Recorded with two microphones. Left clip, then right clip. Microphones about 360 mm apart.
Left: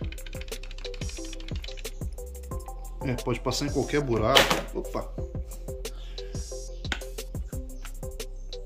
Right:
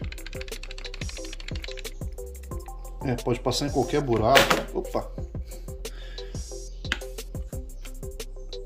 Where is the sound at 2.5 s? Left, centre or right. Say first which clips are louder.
Even; centre.